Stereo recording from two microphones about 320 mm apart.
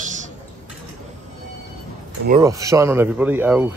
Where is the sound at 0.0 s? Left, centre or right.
Right.